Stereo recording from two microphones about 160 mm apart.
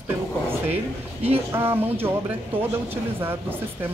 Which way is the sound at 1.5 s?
15° right (ahead or behind).